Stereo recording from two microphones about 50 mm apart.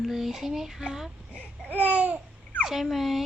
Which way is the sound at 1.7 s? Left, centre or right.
Right.